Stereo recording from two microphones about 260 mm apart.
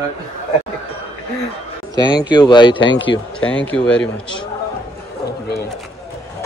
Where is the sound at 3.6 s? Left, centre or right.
Centre.